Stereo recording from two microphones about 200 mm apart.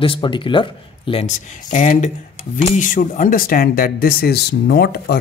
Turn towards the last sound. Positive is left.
turn(degrees=55)  # may be behind; listen again after turning